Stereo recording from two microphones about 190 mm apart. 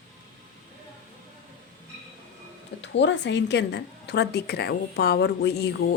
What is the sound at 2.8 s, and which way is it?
A woman's voice, 70° left (ahead or behind).